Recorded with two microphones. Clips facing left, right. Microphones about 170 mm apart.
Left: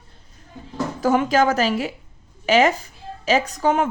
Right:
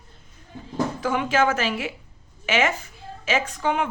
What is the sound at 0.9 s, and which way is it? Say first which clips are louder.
A woman's voice: left 6 dB; 40° left (ahead or behind).